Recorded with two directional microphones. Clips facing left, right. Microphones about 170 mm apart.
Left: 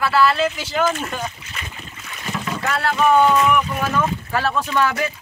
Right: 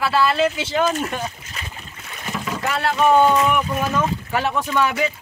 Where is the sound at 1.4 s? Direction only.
35° right (ahead or behind).